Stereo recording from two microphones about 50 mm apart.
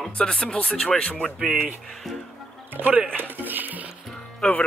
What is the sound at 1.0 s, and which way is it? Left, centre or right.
Speech, left.